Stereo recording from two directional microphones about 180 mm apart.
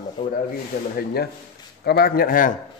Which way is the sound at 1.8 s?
60° left (ahead or behind).